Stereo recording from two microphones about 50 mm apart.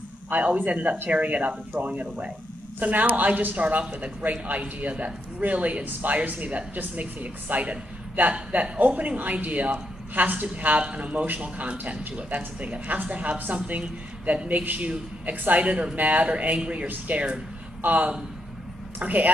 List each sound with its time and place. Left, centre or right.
0.3 s a man's voice: right